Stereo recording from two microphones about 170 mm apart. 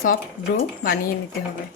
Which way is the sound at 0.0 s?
60° left (ahead or behind).